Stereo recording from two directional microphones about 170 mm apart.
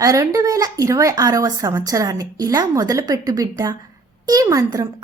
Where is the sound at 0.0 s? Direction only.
20° right (ahead or behind).